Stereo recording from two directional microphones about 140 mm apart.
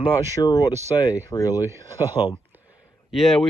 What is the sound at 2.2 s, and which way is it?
Speech, 40° left (ahead or behind).